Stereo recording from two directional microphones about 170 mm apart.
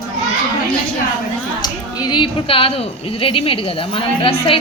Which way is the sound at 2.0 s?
25° left (ahead or behind).